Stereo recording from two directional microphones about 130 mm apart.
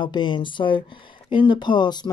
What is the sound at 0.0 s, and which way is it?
Speech, 35° left (ahead or behind).